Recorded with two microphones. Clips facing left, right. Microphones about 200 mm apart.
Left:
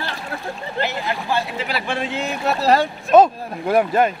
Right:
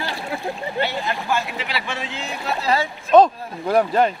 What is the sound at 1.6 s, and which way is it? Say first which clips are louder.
Speech: left 4 dB; 45° left (ahead or behind).